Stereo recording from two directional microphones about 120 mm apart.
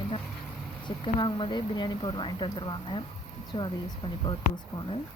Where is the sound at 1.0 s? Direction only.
45° left (ahead or behind).